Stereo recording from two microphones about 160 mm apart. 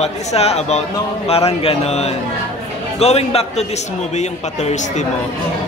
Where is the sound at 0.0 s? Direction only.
40° left (ahead or behind).